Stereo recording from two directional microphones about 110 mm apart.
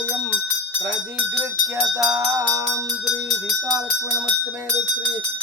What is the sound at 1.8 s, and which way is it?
Music, 5° right (ahead or behind).